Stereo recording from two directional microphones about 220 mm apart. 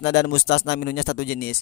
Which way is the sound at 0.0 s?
50° left (ahead or behind).